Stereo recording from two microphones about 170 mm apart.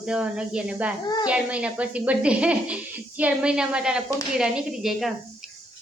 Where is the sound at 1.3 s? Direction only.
5° right (ahead or behind).